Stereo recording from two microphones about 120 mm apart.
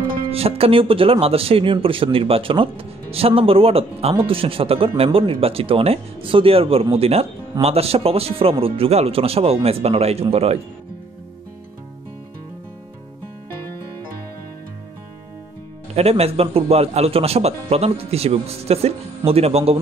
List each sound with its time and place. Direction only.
0.3 s a man's voice: 55° right (ahead or behind)
15.9 s a man's voice: 60° right (ahead or behind)